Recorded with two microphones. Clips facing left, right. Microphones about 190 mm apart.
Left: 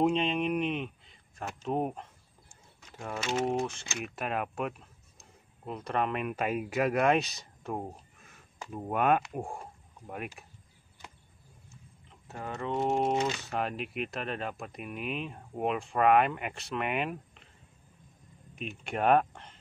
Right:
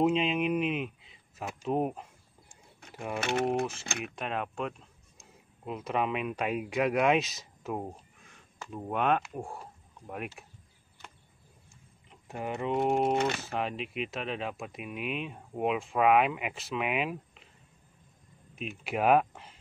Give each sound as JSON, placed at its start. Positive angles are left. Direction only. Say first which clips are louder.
{"t": 0.0, "sound": "speech", "louder": "right 1 dB", "side_deg": -5}
{"t": 3.2, "sound": "speech", "louder": "right 1 dB", "side_deg": -60}
{"t": 4.1, "sound": "speech", "louder": "left 3 dB", "side_deg": 5}
{"t": 8.5, "sound": "speech", "louder": "left 1 dB", "side_deg": 15}
{"t": 8.9, "sound": "speech", "louder": "left 2 dB", "side_deg": 5}
{"t": 9.3, "sound": "speech", "louder": "left 2 dB", "side_deg": 15}
{"t": 10.0, "sound": "speech", "louder": "right 1 dB", "side_deg": 0}
{"t": 12.3, "sound": "speech", "louder": "right 3 dB", "side_deg": -15}
{"t": 12.8, "sound": "speech", "louder": "right 1 dB", "side_deg": 0}
{"t": 13.1, "sound": "speech", "louder": "right 1 dB", "side_deg": -60}
{"t": 13.4, "sound": "speech", "louder": "even", "side_deg": 0}
{"t": 18.6, "sound": "speech", "louder": "right 1 dB", "side_deg": -5}